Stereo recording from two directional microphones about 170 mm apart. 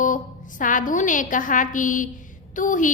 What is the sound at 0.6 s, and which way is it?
A woman's voice, 50° left (ahead or behind).